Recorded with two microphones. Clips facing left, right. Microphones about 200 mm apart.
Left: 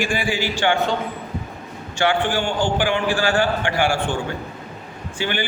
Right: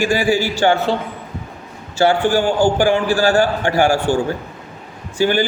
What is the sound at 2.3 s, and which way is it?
A man's voice, 40° right (ahead or behind).